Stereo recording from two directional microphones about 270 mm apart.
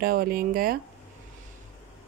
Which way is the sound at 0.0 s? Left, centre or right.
Right.